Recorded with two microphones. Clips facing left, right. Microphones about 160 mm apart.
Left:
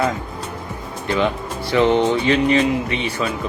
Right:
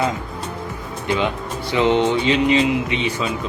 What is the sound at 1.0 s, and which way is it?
Speech, 15° right (ahead or behind).